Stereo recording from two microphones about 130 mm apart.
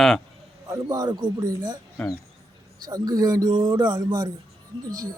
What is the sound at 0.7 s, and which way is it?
Speech, 30° right (ahead or behind).